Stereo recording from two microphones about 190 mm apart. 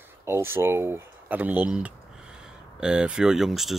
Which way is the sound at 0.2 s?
15° right (ahead or behind).